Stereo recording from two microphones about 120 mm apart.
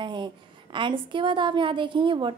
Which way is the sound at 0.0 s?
40° right (ahead or behind).